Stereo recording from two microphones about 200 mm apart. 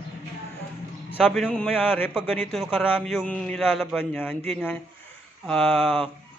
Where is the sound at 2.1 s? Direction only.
5° right (ahead or behind).